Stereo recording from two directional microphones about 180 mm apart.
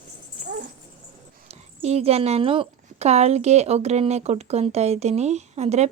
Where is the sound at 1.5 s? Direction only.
35° right (ahead or behind).